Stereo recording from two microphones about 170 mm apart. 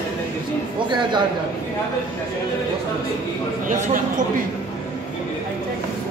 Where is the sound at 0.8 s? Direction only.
25° right (ahead or behind).